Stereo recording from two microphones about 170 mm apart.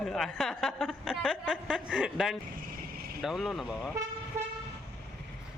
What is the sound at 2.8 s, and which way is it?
Vehicle, 60° right (ahead or behind).